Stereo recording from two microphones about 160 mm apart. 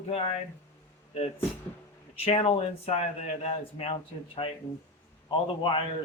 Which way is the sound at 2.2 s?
35° left (ahead or behind).